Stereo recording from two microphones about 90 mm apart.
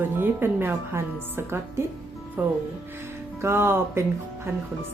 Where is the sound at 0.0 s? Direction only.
25° right (ahead or behind).